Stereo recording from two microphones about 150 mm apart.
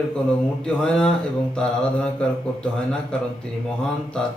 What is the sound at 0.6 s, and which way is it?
Speech, 5° left (ahead or behind).